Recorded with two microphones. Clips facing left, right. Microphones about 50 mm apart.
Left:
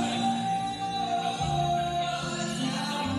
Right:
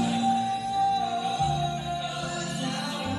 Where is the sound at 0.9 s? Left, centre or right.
Centre.